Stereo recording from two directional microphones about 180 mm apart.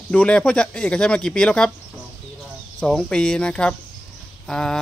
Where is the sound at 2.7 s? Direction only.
5° left (ahead or behind).